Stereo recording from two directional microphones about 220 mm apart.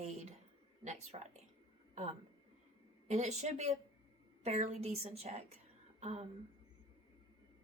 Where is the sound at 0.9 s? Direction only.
30° right (ahead or behind).